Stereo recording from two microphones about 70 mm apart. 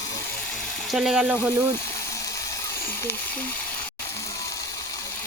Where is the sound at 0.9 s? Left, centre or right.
Centre.